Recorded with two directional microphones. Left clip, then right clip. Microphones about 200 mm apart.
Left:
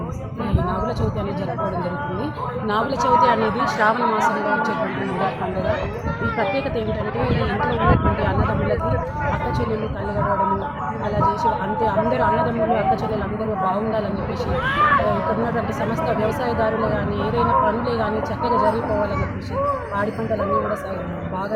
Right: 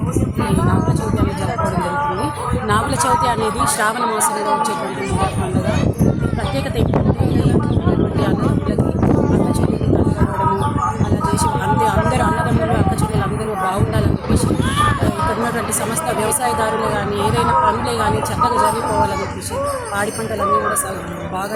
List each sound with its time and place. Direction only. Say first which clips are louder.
2.6 s speech: right 2 dB; 25° right (ahead or behind)